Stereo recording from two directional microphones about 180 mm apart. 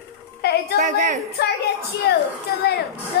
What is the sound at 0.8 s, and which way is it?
Speech, 45° right (ahead or behind).